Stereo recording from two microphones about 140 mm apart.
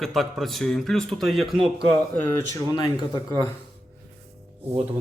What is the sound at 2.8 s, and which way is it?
Speech, 25° left (ahead or behind).